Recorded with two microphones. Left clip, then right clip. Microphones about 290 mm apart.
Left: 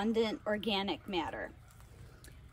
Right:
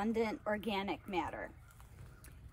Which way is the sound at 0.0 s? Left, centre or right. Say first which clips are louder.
Left 3 dB; centre.